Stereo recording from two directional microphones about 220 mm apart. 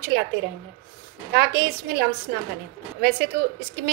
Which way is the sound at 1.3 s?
45° right (ahead or behind).